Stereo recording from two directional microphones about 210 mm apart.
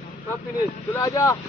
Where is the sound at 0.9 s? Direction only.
15° left (ahead or behind).